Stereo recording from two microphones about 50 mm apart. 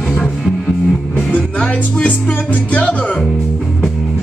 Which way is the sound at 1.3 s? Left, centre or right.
Left.